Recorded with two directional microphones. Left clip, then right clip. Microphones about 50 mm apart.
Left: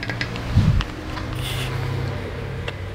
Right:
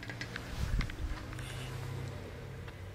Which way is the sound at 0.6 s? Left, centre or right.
Right.